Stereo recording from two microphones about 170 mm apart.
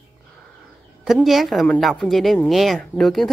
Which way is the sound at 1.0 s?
Centre (ahead or behind).